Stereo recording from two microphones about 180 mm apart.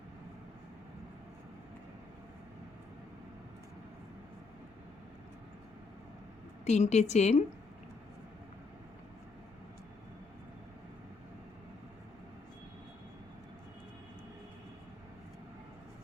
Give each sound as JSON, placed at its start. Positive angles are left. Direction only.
{"t": 6.7, "sound": "a woman's voice", "side_deg": 40}